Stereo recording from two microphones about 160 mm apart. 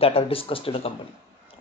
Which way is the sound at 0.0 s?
35° left (ahead or behind).